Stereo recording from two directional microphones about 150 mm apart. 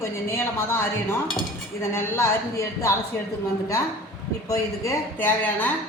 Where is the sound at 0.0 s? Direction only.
15° left (ahead or behind).